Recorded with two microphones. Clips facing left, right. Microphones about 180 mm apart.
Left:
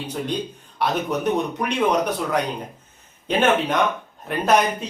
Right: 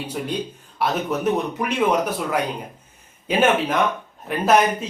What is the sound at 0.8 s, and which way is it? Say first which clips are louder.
A man's voice: even; 5° right (ahead or behind).